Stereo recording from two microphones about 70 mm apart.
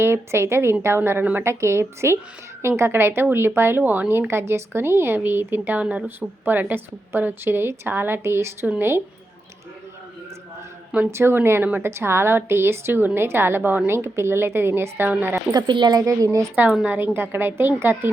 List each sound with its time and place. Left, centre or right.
0.0 s a woman's voice: right
1.2 s a woman's voice: right
1.5 s a woman's voice: right
4.3 s a woman's voice: right
11.1 s a woman's voice: right
15.5 s speech: right
16.8 s a woman's voice: right